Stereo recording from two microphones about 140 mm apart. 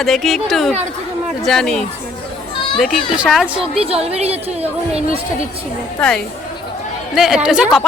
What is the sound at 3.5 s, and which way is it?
A woman's voice, 40° right (ahead or behind).